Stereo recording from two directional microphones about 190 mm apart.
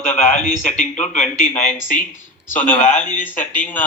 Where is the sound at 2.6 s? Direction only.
10° left (ahead or behind).